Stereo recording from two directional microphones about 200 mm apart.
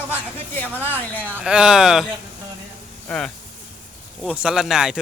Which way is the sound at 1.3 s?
5° right (ahead or behind).